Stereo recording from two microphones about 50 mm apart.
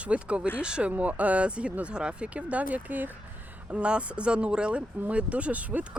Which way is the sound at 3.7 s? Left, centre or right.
Right.